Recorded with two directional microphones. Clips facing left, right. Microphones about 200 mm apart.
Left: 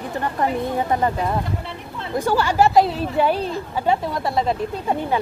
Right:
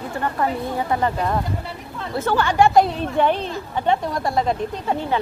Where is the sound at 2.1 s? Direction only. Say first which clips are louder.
Even; 10° left (ahead or behind).